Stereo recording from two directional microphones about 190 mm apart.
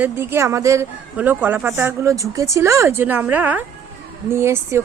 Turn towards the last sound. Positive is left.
turn(degrees=-15)  # may be behind; listen again after turning